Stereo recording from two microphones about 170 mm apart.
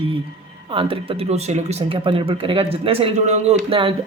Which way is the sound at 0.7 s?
30° right (ahead or behind).